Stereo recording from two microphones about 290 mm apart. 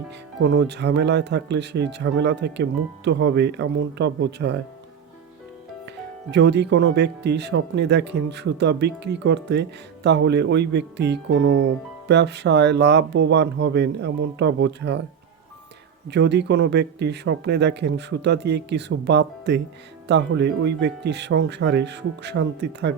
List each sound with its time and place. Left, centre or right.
0.4 s speech: right
6.3 s speech: right
16.0 s speech: right